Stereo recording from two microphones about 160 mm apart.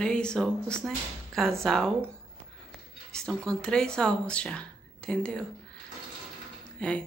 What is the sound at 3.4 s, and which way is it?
Speech, 5° left (ahead or behind).